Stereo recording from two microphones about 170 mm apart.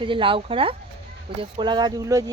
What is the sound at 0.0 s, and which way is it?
Speech, 30° right (ahead or behind).